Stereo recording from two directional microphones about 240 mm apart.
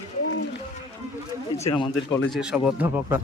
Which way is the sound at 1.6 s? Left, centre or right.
Left.